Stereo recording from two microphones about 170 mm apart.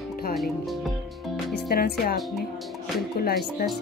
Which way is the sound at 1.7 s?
65° left (ahead or behind).